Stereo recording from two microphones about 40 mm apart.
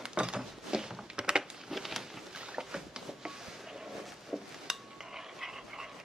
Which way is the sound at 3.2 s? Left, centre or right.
Centre.